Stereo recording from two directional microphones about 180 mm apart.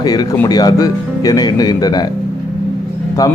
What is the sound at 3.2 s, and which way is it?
Speech, 20° left (ahead or behind).